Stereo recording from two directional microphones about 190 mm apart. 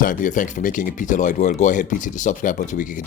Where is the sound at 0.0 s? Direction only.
45° left (ahead or behind).